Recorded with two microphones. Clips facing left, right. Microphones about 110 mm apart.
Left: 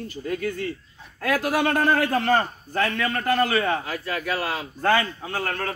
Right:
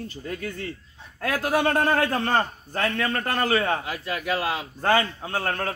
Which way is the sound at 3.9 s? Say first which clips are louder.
Even; 20° right (ahead or behind).